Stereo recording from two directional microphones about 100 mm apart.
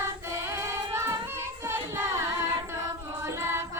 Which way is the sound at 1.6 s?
25° right (ahead or behind).